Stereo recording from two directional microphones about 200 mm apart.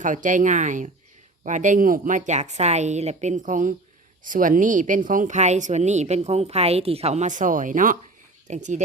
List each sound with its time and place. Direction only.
0.0 s speech: 40° right (ahead or behind)